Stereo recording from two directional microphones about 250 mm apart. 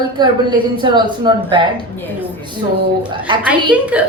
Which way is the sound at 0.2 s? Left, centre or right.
Centre.